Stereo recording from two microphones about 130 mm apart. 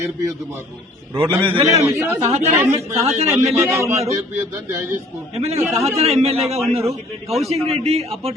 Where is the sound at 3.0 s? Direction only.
55° right (ahead or behind).